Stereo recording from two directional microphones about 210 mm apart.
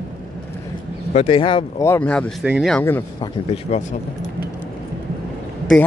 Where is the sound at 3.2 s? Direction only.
30° left (ahead or behind).